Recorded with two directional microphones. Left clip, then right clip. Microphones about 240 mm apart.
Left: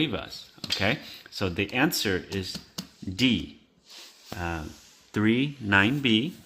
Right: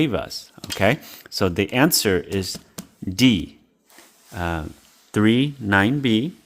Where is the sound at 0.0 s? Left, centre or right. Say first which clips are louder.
Right 7 dB; right.